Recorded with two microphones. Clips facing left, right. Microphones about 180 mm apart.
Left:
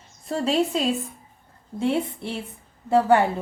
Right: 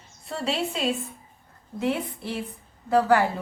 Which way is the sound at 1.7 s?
30° left (ahead or behind).